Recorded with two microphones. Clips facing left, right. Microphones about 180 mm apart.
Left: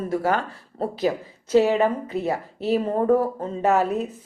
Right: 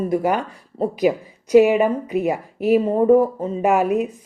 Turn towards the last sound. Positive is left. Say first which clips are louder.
# right 3 dB
turn(degrees=-10)  # may be behind; listen again after turning